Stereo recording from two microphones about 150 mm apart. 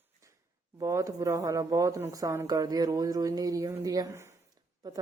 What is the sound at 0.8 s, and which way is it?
A woman's voice, 20° right (ahead or behind).